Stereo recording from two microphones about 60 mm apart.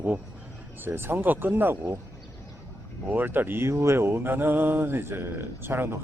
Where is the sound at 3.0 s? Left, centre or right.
Right.